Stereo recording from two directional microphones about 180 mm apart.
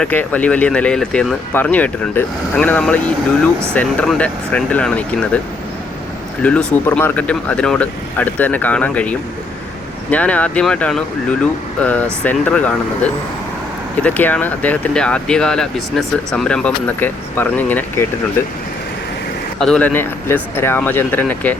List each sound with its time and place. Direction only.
0.0 s speech: 10° left (ahead or behind)
6.4 s speech: 5° left (ahead or behind)
14.0 s speech: 10° left (ahead or behind)
19.5 s speech: 5° left (ahead or behind)